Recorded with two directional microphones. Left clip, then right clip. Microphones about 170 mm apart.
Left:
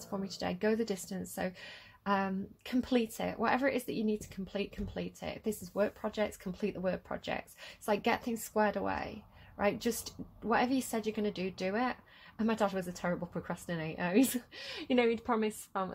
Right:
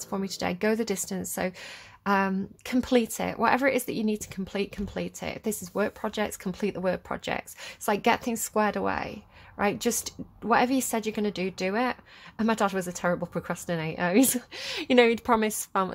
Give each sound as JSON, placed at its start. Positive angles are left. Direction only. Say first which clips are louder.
{"t": 0.1, "sound": "a woman's voice", "louder": "right 7 dB", "side_deg": -35}